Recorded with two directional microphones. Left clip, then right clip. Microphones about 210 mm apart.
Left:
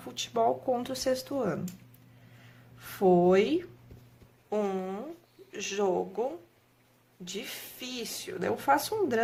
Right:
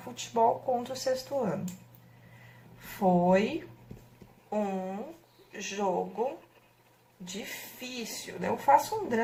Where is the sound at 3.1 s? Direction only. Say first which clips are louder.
Left 2 dB; 45° left (ahead or behind).